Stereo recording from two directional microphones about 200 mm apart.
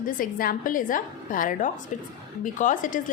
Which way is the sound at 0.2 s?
45° left (ahead or behind).